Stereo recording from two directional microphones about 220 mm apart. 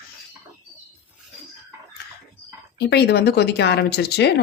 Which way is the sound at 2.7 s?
50° left (ahead or behind).